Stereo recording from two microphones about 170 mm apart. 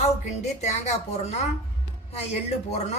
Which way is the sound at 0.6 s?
40° left (ahead or behind).